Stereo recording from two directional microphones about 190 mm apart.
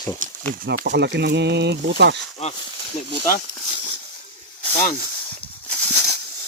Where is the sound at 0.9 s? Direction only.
65° right (ahead or behind).